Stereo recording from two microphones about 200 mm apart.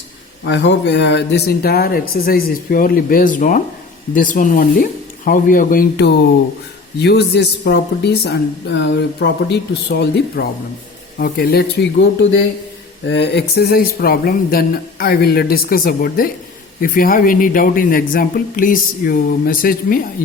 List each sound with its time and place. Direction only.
0.4 s speech: 60° left (ahead or behind); by 20.0 s 45° left (ahead or behind)